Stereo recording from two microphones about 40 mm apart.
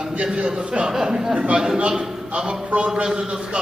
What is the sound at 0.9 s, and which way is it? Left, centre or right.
Speech, centre.